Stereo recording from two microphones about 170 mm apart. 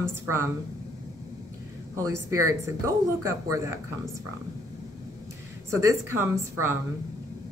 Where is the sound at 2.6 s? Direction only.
20° right (ahead or behind).